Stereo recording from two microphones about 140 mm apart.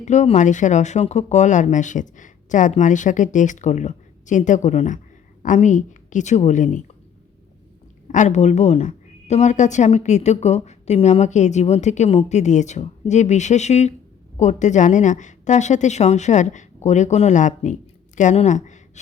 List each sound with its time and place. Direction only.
0.0 s a woman's voice: 60° left (ahead or behind)
8.0 s speech: 60° left (ahead or behind)